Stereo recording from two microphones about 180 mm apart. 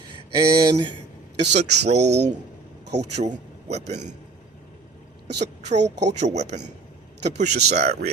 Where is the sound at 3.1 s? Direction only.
40° right (ahead or behind).